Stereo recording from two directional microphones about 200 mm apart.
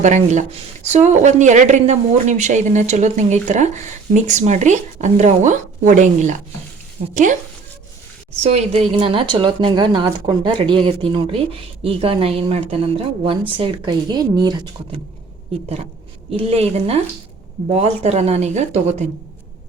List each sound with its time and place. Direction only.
0.0 s speech: 35° right (ahead or behind)
8.4 s speech: 30° right (ahead or behind)
16.3 s speech: 30° right (ahead or behind)